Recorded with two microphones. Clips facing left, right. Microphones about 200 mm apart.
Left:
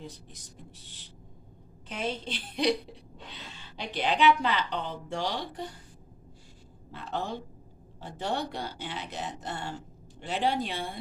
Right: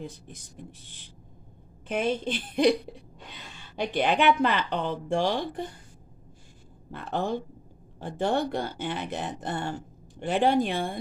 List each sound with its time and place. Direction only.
0.0 s a woman's voice: 55° right (ahead or behind)
6.9 s a woman's voice: 55° right (ahead or behind)